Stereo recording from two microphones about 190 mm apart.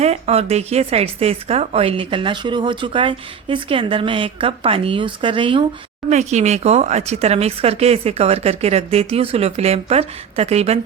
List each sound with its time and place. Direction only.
0.0 s speech: 35° right (ahead or behind)